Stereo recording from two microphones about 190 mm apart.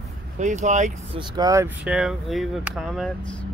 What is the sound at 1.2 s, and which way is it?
Speech, 20° right (ahead or behind).